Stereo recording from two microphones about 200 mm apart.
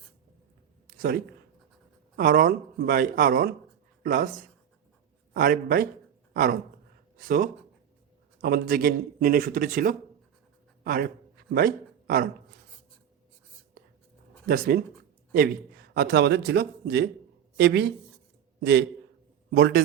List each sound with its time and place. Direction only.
0.9 s a sound: 50° right (ahead or behind)
2.1 s a man's voice: 45° right (ahead or behind)
14.4 s a man's voice: 45° right (ahead or behind)